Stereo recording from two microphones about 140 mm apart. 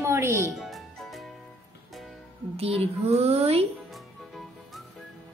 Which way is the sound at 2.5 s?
45° right (ahead or behind).